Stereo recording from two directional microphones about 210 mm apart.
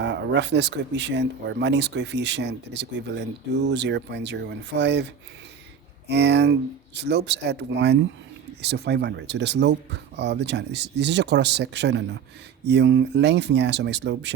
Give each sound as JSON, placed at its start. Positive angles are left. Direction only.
{"t": 0.0, "sound": "speech", "side_deg": -55}